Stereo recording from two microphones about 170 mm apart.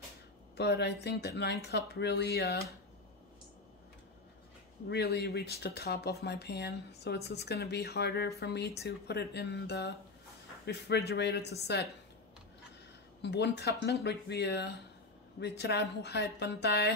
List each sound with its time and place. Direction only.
0.6 s speech: 80° left
4.8 s speech: 80° left
13.2 s speech: 85° left